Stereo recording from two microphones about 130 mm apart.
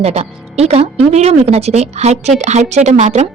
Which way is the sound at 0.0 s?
55° right (ahead or behind).